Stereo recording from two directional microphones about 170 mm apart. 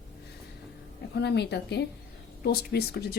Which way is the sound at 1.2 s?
80° left.